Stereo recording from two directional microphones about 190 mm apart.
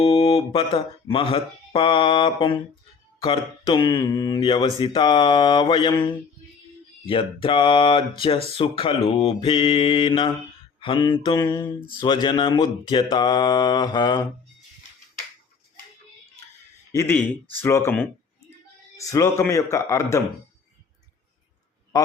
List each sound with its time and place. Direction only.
0.0 s mantra: 30° left (ahead or behind)
16.9 s a man's voice: 15° left (ahead or behind)